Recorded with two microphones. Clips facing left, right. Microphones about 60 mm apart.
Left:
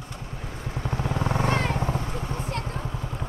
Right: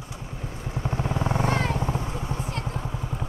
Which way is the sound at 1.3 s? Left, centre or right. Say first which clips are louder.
Left 1 dB; left.